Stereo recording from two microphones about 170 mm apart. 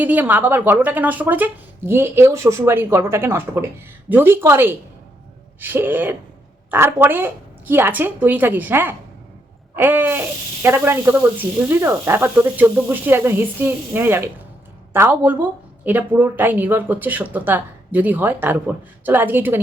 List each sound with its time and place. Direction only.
0.0 s speech: 10° right (ahead or behind)